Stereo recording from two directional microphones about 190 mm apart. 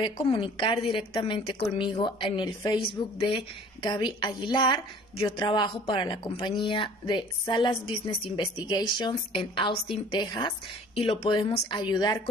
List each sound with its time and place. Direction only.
0.0 s a woman's voice: 25° left (ahead or behind)